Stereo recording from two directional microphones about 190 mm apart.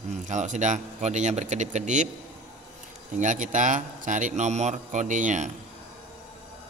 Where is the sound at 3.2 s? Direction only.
40° right (ahead or behind).